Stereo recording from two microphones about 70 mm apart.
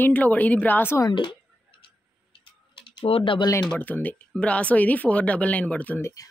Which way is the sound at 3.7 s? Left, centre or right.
Left.